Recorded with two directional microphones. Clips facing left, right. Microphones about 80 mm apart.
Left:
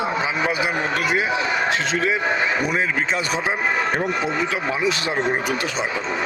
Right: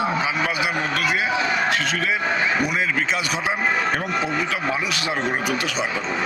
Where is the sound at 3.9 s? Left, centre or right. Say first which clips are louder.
Left 1 dB; left.